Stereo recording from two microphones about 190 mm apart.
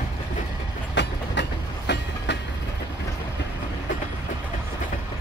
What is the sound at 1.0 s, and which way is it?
Train, 65° left (ahead or behind).